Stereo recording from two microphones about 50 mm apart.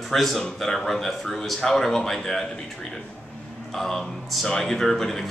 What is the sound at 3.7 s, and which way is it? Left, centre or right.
A man's voice, centre.